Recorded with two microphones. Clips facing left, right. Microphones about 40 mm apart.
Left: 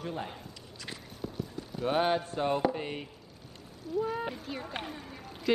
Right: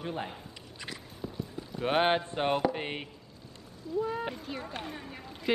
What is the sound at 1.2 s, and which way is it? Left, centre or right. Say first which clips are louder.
Clip-clop: left 1 dB; left.